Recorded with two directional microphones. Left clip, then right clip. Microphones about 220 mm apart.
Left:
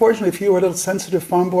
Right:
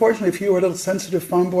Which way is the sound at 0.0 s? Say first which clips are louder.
Left 2 dB; 25° left (ahead or behind).